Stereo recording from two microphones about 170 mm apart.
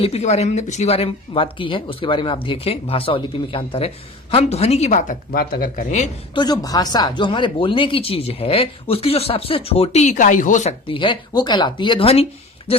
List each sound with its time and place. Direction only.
0.0 s speech: 40° left (ahead or behind)
6.3 s speech: 25° left (ahead or behind)